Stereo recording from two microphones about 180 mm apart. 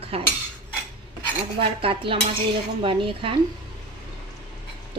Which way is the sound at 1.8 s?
30° right (ahead or behind).